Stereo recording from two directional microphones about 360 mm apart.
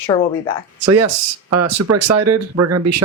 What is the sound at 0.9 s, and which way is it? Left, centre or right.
Speech, right.